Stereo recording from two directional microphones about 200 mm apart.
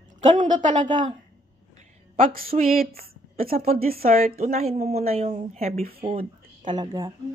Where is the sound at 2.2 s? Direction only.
45° right (ahead or behind).